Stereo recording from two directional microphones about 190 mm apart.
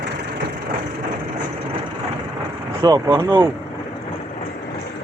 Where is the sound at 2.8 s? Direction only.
20° right (ahead or behind).